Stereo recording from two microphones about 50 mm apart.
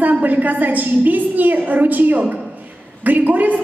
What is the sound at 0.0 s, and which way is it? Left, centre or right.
A woman's voice, right.